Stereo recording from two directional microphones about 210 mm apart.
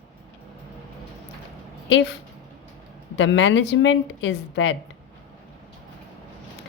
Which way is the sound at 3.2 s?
60° left (ahead or behind).